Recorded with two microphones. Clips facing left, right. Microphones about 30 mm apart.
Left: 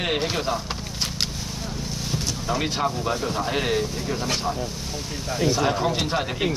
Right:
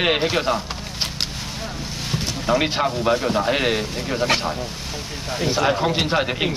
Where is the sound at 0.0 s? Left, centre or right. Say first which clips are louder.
Right 5 dB; right.